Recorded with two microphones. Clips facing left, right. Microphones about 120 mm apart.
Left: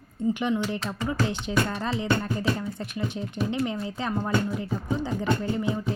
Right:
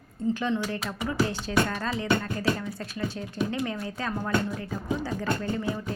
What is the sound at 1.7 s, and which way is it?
A woman's voice, 20° left (ahead or behind).